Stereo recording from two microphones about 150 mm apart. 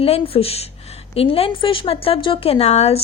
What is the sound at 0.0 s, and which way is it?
A woman's voice, 40° left (ahead or behind).